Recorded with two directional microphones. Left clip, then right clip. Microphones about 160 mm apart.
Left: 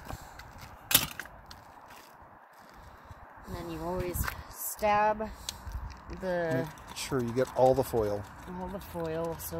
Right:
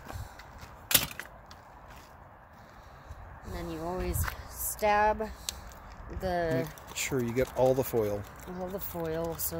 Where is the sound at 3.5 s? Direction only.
20° right (ahead or behind).